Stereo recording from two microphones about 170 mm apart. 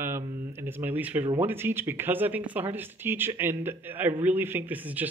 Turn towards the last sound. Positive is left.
turn(degrees=-10)  # may be behind; listen again after turning